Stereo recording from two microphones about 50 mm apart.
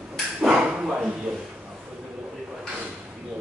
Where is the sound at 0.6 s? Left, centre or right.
Centre.